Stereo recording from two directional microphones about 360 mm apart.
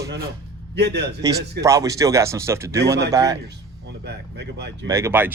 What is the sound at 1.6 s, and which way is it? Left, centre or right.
Speech, centre.